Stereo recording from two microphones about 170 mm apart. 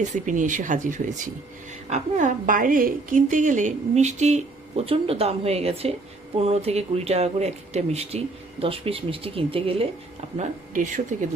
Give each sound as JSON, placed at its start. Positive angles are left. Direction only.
{"t": 0.1, "sound": "a woman's voice", "side_deg": -50}
{"t": 10.3, "sound": "a woman's voice", "side_deg": -45}